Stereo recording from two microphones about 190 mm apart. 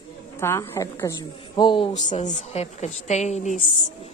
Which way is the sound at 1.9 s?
40° left (ahead or behind).